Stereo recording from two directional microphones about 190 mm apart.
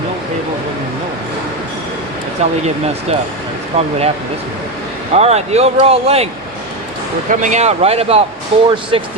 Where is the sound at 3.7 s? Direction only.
30° right (ahead or behind).